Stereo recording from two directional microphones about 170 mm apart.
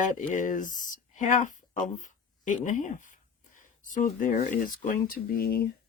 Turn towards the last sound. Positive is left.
turn(degrees=60)  # may be behind; listen again after turning